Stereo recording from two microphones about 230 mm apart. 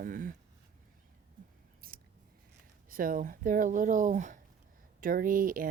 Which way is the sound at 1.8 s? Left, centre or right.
Right.